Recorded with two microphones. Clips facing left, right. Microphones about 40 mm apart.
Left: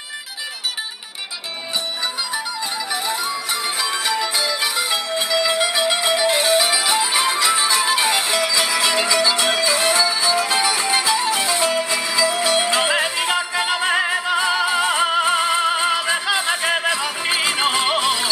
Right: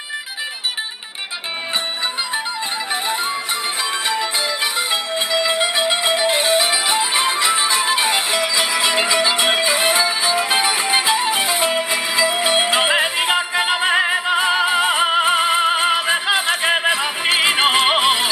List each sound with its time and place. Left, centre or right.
4.1 s music: right